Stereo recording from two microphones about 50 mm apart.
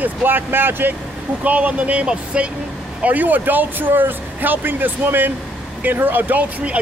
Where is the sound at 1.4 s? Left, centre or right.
Right.